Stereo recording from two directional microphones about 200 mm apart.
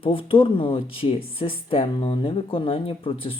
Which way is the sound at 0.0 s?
25° left (ahead or behind).